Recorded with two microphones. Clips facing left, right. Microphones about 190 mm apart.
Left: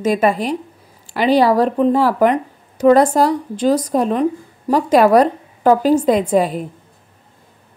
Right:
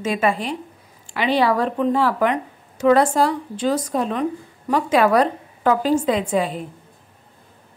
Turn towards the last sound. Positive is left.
turn(degrees=40)  # may be behind; listen again after turning